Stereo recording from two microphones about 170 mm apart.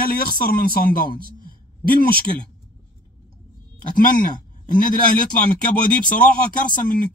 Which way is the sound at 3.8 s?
55° left (ahead or behind).